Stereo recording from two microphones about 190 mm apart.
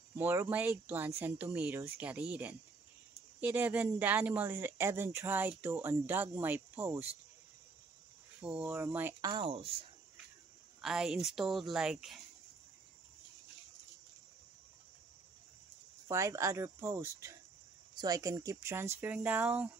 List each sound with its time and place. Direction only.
0.1 s speech: 10° right (ahead or behind)
8.4 s speech: centre (ahead or behind)
8.6 s speech: 15° right (ahead or behind)
9.3 s speech: 30° right (ahead or behind)
10.8 s speech: centre (ahead or behind)
16.1 s speech: 15° right (ahead or behind)